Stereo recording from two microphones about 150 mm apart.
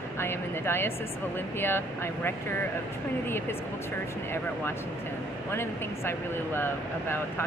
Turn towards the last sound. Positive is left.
turn(degrees=15)  # may be behind; listen again after turning